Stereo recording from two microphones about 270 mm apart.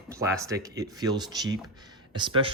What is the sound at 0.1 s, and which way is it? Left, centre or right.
Speech, centre.